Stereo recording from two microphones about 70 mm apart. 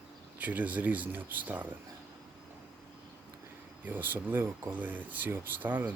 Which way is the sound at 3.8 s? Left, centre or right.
Right.